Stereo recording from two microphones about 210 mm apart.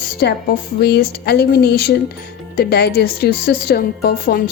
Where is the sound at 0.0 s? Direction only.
50° left (ahead or behind).